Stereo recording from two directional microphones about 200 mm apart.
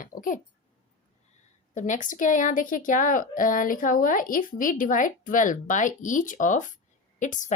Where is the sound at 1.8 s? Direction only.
40° left (ahead or behind).